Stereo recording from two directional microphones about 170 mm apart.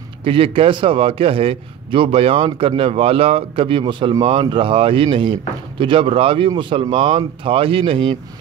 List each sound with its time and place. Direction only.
0.2 s a man's voice: 30° right (ahead or behind)